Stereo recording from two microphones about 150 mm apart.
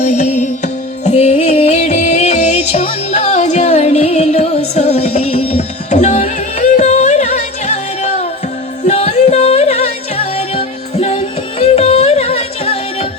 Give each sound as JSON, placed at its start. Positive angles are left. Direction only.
{"t": 0.0, "sound": "music", "side_deg": 55}